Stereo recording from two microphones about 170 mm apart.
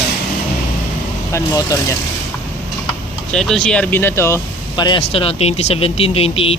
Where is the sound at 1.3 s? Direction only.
20° left (ahead or behind).